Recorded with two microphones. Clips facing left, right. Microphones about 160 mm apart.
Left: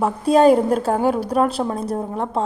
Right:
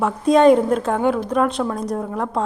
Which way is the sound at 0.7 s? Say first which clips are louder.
Even; 35° left (ahead or behind).